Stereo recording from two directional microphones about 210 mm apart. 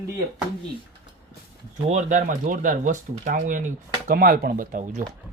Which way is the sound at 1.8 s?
35° right (ahead or behind).